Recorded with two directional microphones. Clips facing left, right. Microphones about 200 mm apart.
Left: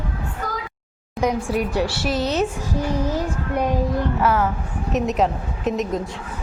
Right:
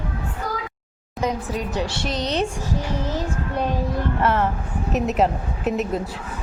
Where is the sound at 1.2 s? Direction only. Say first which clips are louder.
Left 4 dB; 10° left (ahead or behind).